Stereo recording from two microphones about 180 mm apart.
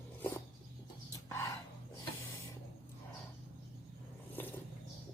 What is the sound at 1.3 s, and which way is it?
Dog, 15° left (ahead or behind).